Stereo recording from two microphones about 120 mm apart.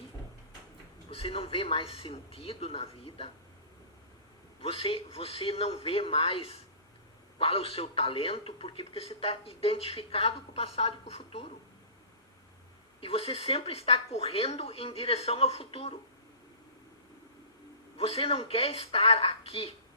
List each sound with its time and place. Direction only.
1.1 s a man's voice: 50° left (ahead or behind)
4.6 s a man's voice: 50° left (ahead or behind)
13.0 s a man's voice: 50° left (ahead or behind)
17.9 s a man's voice: 55° left (ahead or behind)